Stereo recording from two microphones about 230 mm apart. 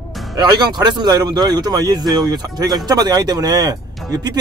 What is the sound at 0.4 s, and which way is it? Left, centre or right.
Speech, centre.